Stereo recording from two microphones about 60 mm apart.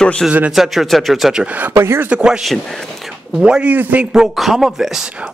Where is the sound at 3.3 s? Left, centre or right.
Centre.